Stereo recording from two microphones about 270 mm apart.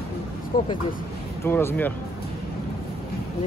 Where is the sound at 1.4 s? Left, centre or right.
Centre.